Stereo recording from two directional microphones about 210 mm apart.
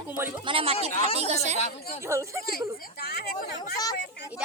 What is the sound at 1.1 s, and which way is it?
Speech, 30° right (ahead or behind).